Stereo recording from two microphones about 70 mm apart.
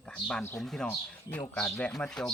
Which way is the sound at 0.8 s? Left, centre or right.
Centre.